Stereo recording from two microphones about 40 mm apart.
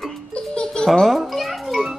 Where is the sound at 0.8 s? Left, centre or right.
Centre.